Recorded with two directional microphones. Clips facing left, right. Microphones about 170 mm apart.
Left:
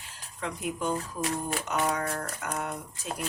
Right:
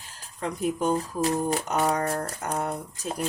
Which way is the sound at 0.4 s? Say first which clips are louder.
Right 5 dB; 35° right (ahead or behind).